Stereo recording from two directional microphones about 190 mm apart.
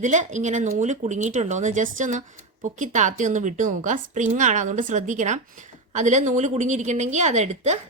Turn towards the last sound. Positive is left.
turn(degrees=-40)  # may be behind; listen again after turning